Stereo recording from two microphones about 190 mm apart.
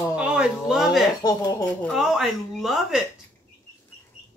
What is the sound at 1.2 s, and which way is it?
Speech, 20° left (ahead or behind).